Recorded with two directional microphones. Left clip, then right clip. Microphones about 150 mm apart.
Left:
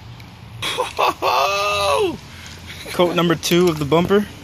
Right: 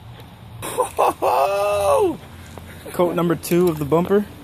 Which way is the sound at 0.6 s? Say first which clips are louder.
Even; 50° right (ahead or behind).